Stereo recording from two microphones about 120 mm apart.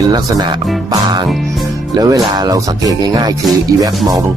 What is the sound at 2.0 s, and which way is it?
Music, 30° right (ahead or behind).